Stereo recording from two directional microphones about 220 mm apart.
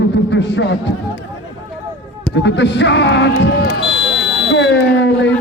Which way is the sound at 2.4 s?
55° left (ahead or behind).